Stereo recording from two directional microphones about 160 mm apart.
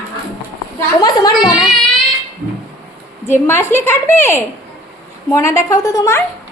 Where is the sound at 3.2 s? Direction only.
15° left (ahead or behind).